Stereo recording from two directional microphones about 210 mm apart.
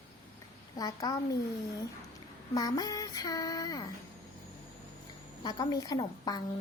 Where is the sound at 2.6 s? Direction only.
20° left (ahead or behind).